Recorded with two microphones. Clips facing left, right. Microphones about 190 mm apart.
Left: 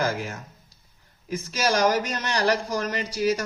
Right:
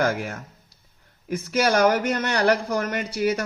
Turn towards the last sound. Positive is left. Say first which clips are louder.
# right 1 dB
turn(degrees=-55)  # may be behind; listen again after turning